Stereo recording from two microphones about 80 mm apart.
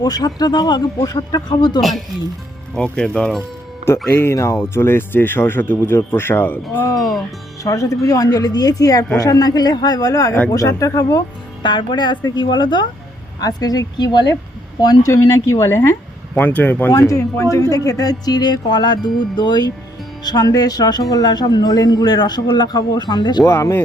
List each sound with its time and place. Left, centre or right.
0.0 s speech: left
2.7 s speech: centre
3.8 s speech: left
6.8 s speech: left
11.6 s a woman's voice: left
13.4 s speech: left
15.0 s speech: left
16.3 s speech: centre
17.1 s speech: left
23.4 s speech: left